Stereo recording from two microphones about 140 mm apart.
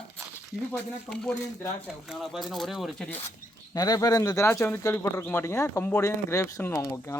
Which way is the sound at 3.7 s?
25° left (ahead or behind).